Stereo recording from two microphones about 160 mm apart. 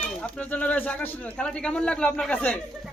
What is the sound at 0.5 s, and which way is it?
A man's voice, 10° left (ahead or behind).